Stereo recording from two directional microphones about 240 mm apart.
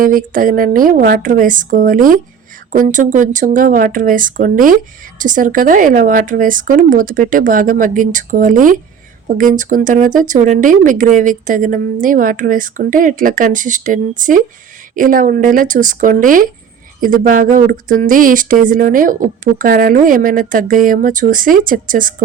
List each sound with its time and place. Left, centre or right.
0.0 s speech: right